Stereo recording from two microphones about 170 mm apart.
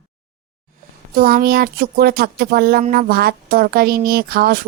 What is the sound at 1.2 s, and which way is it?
Speech, 60° right (ahead or behind).